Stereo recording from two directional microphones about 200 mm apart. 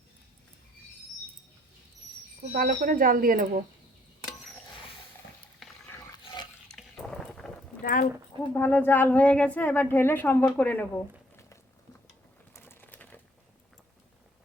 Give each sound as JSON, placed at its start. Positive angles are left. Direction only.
{"t": 2.5, "sound": "speech", "side_deg": -45}
{"t": 5.6, "sound": "a sound", "side_deg": 0}
{"t": 6.2, "sound": "stir", "side_deg": 20}
{"t": 6.7, "sound": "liquid", "side_deg": 5}
{"t": 7.8, "sound": "clip-clop", "side_deg": 45}
{"t": 8.5, "sound": "a woman's voice", "side_deg": 10}
{"t": 12.5, "sound": "bird", "side_deg": 10}